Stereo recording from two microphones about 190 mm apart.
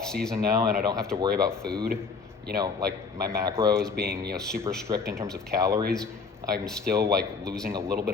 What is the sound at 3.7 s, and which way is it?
Speech, 5° left (ahead or behind).